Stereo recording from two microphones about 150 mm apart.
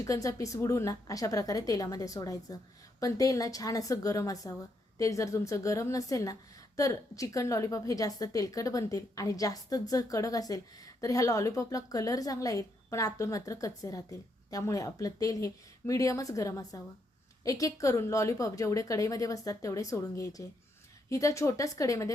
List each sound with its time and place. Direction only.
0.0 s a woman's voice: 20° left (ahead or behind)